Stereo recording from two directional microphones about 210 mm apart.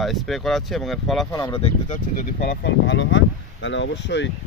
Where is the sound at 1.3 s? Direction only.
15° left (ahead or behind).